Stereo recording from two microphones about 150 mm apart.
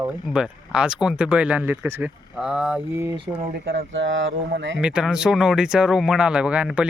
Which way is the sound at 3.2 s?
35° right (ahead or behind).